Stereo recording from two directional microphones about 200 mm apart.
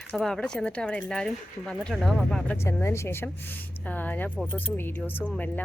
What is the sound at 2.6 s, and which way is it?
Speech, 15° left (ahead or behind).